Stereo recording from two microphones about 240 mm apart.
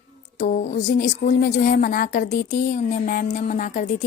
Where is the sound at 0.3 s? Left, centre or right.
Left.